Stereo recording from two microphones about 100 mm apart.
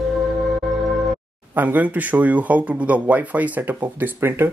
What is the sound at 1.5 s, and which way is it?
Speech, 20° right (ahead or behind).